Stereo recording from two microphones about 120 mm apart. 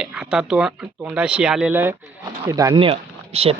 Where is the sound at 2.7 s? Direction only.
50° right (ahead or behind).